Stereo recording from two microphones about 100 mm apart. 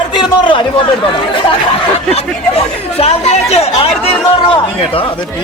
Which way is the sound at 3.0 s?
90° left.